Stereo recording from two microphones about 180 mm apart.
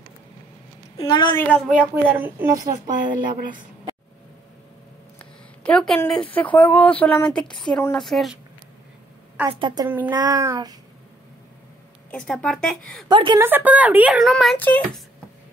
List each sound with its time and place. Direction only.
0.9 s a woman's voice: 25° left (ahead or behind)
1.3 s speech: 10° left (ahead or behind)
1.7 s a woman's voice: 10° right (ahead or behind)
3.1 s speech: 50° right (ahead or behind)
5.2 s a sound: 5° left (ahead or behind)
6.2 s speech: 10° left (ahead or behind)
9.5 s child singing: 25° right (ahead or behind)
9.8 s a woman's voice: 10° right (ahead or behind)
10.1 s child singing: 20° right (ahead or behind)
12.1 s speech: 5° left (ahead or behind)
13.1 s child singing: 25° right (ahead or behind)
13.4 s speech: 10° right (ahead or behind); by 14.9 s 10° left (ahead or behind)